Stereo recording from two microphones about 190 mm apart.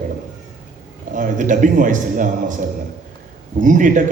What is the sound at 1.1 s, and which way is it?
A man's voice, 45° right (ahead or behind).